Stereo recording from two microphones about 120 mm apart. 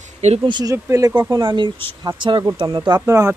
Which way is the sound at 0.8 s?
25° right (ahead or behind).